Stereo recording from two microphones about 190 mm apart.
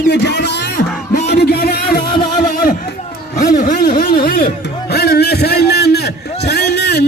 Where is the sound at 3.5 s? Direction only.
50° left (ahead or behind).